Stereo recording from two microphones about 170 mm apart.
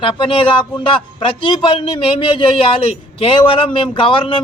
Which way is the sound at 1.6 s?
30° left (ahead or behind).